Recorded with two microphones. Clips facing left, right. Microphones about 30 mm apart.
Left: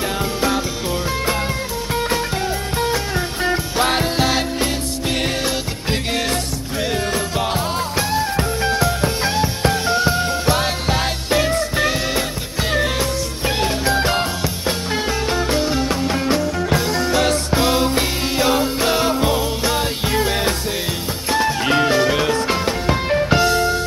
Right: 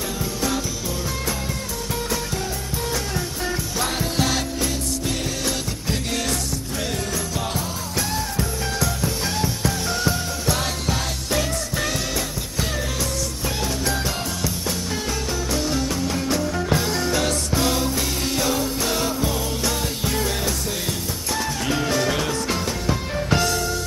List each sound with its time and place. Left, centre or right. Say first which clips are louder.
3.4 s music: left 8 dB; left
8.1 s music: left 6 dB; left
13.6 s music: left 7 dB; left
15.3 s music: left 4 dB; left